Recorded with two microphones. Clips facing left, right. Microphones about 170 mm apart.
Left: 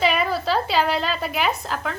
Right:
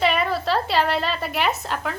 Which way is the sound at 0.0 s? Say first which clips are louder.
Even; centre (ahead or behind).